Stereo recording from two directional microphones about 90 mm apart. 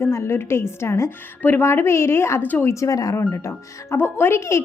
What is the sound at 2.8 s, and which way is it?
A woman's voice, 40° left (ahead or behind).